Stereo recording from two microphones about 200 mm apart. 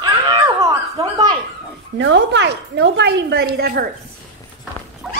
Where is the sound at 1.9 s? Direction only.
65° right (ahead or behind).